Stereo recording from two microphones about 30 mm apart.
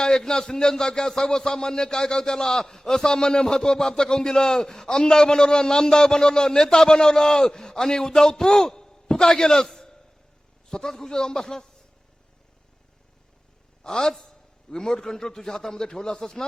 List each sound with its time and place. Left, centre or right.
0.0 s a man's voice: left
10.7 s a man's voice: centre
13.8 s a man's voice: left